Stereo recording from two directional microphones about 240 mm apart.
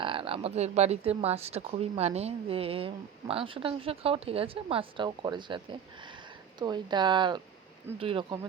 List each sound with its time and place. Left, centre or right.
0.0 s speech: right